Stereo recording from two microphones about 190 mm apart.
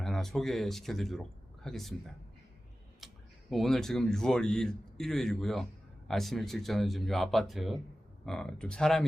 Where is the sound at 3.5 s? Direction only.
Centre (ahead or behind).